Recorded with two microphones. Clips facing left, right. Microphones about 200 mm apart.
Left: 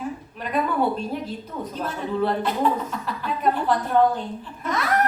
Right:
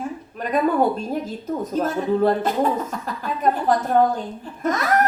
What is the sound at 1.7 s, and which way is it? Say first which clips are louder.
A woman's voice: right 7 dB; 45° right (ahead or behind).